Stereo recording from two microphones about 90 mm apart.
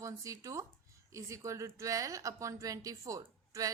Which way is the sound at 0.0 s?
35° right (ahead or behind).